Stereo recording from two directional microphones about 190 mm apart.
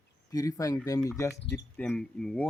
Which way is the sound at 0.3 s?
20° left (ahead or behind).